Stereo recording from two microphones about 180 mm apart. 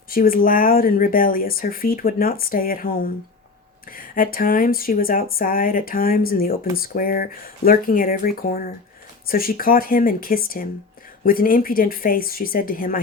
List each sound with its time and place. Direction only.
0.1 s speech: 55° left (ahead or behind)